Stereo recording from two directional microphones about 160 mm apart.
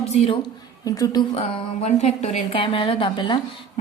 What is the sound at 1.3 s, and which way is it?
A woman's voice, 35° left (ahead or behind).